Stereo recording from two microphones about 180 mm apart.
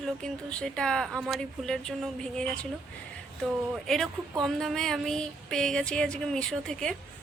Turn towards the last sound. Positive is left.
turn(degrees=5)  # may be behind; listen again after turning